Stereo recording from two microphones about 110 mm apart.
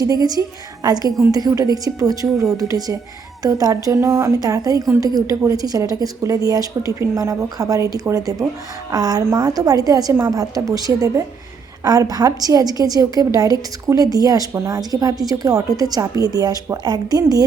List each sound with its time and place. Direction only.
0.0 s a woman's voice: 35° right (ahead or behind)